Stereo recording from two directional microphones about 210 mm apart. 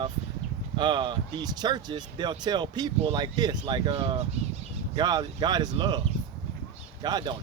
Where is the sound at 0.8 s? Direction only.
20° right (ahead or behind).